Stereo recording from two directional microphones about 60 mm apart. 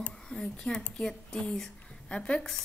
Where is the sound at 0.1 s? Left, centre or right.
Centre.